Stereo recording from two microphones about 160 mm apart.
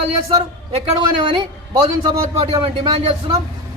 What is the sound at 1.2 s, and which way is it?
A man's voice, 30° right (ahead or behind).